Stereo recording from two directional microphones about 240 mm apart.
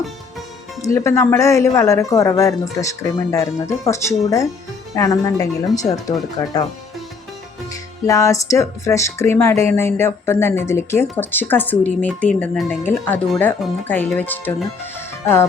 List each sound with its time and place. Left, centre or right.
0.8 s speech: centre
8.0 s speech: centre